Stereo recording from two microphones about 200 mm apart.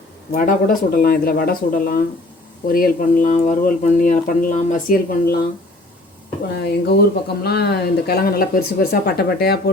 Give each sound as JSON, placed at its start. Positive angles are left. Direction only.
{"t": 0.3, "sound": "speech", "side_deg": 45}
{"t": 6.7, "sound": "speech", "side_deg": 55}